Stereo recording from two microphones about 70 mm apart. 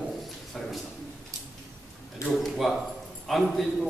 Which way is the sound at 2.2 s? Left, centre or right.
Centre.